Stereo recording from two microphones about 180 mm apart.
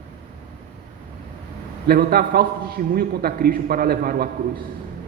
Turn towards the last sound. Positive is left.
turn(degrees=-55)  # may be behind; listen again after turning